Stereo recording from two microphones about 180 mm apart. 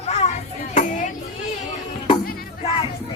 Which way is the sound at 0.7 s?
40° left (ahead or behind).